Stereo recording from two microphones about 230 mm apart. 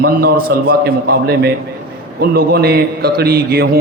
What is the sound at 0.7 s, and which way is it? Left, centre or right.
A man's voice, right.